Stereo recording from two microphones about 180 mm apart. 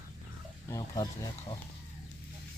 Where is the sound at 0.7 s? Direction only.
20° left (ahead or behind).